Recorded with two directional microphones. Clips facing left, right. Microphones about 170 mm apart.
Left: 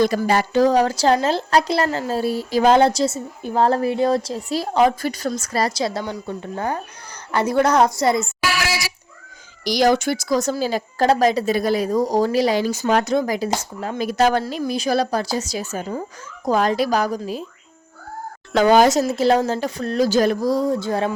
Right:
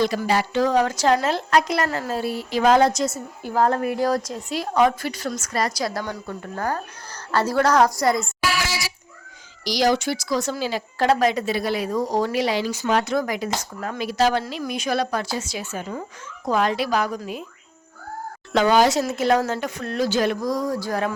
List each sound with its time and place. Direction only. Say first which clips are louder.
0.0 s a woman's voice: left 3 dB; 50° left (ahead or behind); by 4.9 s 30° left (ahead or behind)
5.0 s a woman's voice: left 4 dB; 40° left (ahead or behind); by 8.3 s 25° left (ahead or behind)
8.4 s a sound: left 2 dB; 90° left
9.6 s a woman's voice: left 3 dB; 55° left (ahead or behind); by 13.5 s 35° left (ahead or behind)
13.7 s a woman's voice: left 3 dB; 20° left (ahead or behind)
14.0 s speech: left 3 dB; 50° left (ahead or behind)
14.6 s a woman's voice: left 4 dB; 35° left (ahead or behind)
18.6 s a woman's voice: left 4 dB; 45° left (ahead or behind); by 21.2 s 25° left (ahead or behind)